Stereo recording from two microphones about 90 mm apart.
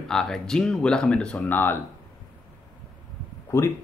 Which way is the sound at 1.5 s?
25° left (ahead or behind).